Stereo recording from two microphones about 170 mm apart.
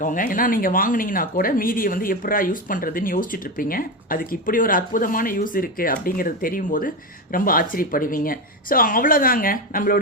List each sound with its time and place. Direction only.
0.0 s speech: 50° left (ahead or behind)